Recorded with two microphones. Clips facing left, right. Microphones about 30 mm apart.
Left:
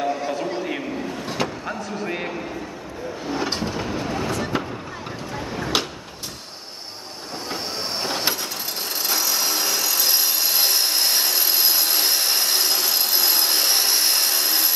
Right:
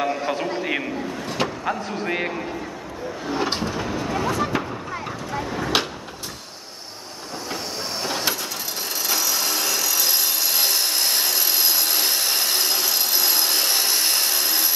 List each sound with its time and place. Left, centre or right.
0.0 s a sound: right
1.4 s speech: right
3.3 s train: centre
3.6 s train: centre
4.1 s a sound: centre
9.0 s wood: centre